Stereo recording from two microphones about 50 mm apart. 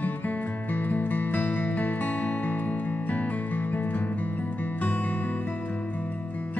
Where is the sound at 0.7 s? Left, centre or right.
Left.